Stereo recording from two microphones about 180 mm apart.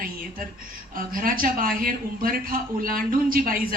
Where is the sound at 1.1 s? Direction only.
50° right (ahead or behind).